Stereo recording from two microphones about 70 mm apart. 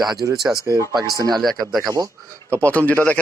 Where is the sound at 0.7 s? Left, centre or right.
Right.